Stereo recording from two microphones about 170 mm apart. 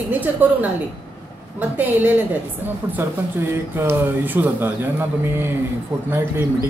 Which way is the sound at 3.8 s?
10° right (ahead or behind).